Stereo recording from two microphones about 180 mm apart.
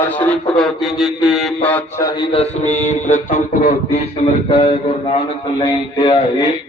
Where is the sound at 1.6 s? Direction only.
10° left (ahead or behind).